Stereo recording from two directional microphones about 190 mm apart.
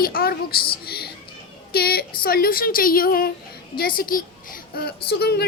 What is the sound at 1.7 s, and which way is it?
A woman's voice, 55° left (ahead or behind).